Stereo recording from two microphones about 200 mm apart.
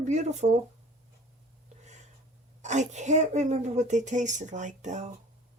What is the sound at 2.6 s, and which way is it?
Speech, 35° right (ahead or behind).